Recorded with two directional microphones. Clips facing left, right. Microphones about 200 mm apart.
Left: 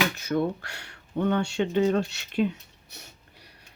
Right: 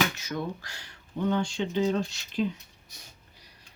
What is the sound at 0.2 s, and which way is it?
Speech, 60° left (ahead or behind).